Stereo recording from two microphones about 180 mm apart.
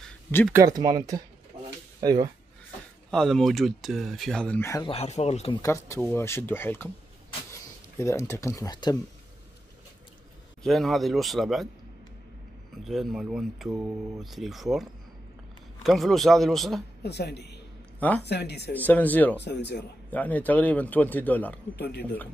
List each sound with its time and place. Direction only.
0.5 s speech: 20° right (ahead or behind)
3.1 s speech: 5° left (ahead or behind)
4.8 s speech: 35° left (ahead or behind)
5.6 s a man's voice: 15° left (ahead or behind)
8.0 s a man's voice: 15° left (ahead or behind)
10.6 s speech: centre (ahead or behind)
12.8 s speech: centre (ahead or behind)
17.0 s speech: 65° left (ahead or behind)
17.9 s speech: 10° left (ahead or behind)
18.2 s speech: 70° left (ahead or behind)
18.7 s a man's voice: 10° left (ahead or behind)
19.4 s speech: 70° left (ahead or behind)
20.1 s a man's voice: 10° left (ahead or behind)
21.7 s speech: 65° left (ahead or behind)